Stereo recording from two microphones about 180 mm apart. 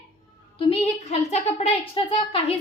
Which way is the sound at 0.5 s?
35° left (ahead or behind).